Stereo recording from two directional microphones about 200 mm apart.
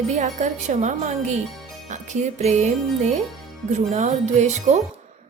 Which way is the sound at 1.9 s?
35° right (ahead or behind).